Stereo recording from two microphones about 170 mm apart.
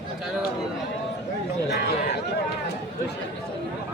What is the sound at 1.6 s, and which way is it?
Chatter, 80° left.